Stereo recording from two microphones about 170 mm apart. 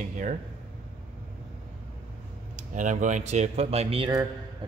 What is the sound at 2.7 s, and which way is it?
A man's voice, 50° right (ahead or behind).